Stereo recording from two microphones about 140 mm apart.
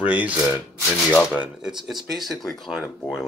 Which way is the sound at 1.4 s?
5° right (ahead or behind).